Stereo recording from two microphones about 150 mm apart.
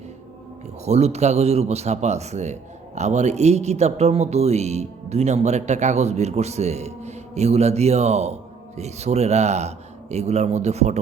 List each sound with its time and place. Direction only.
0.9 s a man's voice: 45° right (ahead or behind)